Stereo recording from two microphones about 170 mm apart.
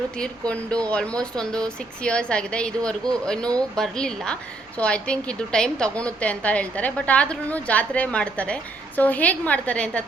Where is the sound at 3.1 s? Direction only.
5° left (ahead or behind).